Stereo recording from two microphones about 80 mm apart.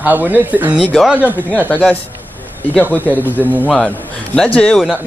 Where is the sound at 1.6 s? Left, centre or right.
Left.